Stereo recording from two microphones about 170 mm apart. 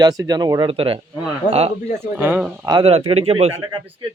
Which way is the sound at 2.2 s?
10° right (ahead or behind).